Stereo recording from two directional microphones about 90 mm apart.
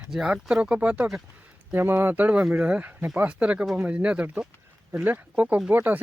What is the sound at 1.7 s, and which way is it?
Speech, 25° right (ahead or behind).